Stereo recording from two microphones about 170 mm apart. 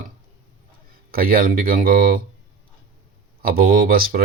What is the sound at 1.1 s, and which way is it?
Speech, 60° right (ahead or behind).